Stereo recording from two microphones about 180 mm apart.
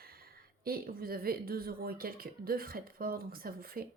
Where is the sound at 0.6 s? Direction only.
55° right (ahead or behind).